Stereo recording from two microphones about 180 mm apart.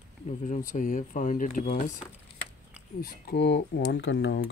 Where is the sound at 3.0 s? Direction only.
65° left (ahead or behind); by 4.4 s 90° left.